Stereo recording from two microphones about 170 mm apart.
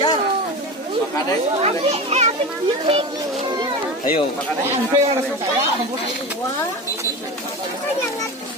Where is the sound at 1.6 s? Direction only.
40° right (ahead or behind).